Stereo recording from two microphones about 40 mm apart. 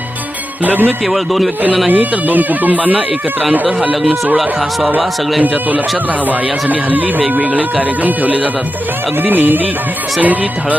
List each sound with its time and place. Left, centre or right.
0.6 s speech: right
1.0 s a man's voice: centre
1.9 s speech: right
5.4 s speech: right
7.2 s speech: right
10.2 s speech: right